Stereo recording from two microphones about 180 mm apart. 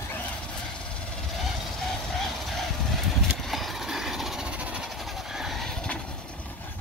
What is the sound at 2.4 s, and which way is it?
Vehicle, centre (ahead or behind).